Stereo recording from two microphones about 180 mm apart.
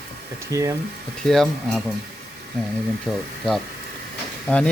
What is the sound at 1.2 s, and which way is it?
Speech, centre (ahead or behind).